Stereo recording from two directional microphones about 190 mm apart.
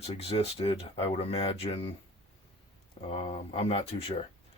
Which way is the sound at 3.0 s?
30° left (ahead or behind).